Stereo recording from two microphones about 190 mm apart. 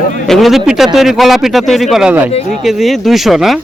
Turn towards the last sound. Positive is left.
turn(degrees=0)  # may be behind; listen again after turning